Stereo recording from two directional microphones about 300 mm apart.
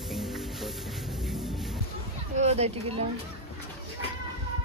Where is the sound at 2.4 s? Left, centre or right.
Right.